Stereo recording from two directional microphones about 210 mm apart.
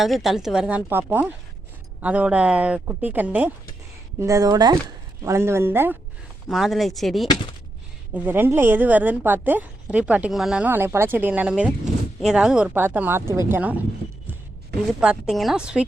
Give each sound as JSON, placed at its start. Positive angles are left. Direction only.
{"t": 0.0, "sound": "a woman's voice", "side_deg": 0}
{"t": 15.0, "sound": "speech", "side_deg": -5}